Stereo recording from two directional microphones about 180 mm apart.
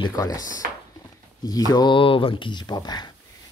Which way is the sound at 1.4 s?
20° left (ahead or behind).